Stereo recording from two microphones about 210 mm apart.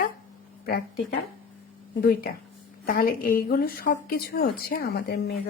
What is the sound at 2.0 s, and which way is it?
A woman's voice, 45° left (ahead or behind).